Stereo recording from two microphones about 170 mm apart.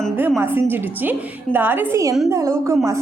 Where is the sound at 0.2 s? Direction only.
10° right (ahead or behind).